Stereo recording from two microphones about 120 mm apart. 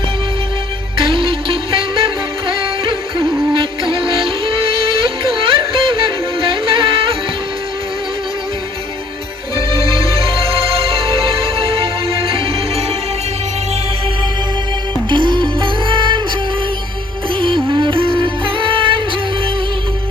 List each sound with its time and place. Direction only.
1.0 s music: 50° right (ahead or behind)
10.4 s music: 50° right (ahead or behind)
15.1 s music: 40° right (ahead or behind)
17.3 s music: 45° right (ahead or behind)